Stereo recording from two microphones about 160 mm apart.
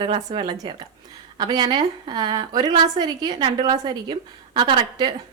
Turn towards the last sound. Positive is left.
turn(degrees=-30)  # may be behind; listen again after turning